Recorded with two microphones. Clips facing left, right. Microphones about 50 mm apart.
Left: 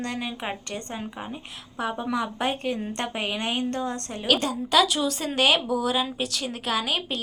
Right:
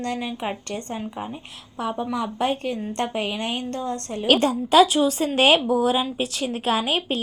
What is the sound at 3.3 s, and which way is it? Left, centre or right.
Speech, left.